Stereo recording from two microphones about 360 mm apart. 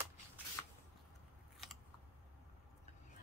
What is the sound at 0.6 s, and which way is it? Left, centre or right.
Squish, centre.